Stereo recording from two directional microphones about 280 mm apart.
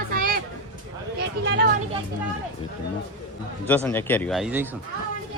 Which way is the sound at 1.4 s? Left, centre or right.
Right.